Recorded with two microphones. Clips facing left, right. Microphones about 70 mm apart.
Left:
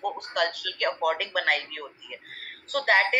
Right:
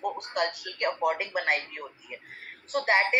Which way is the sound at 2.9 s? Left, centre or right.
Left.